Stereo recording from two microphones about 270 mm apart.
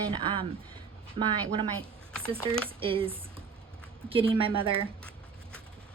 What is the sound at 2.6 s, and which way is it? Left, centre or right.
Speech, centre.